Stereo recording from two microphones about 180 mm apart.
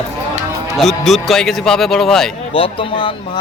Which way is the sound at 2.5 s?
30° left (ahead or behind).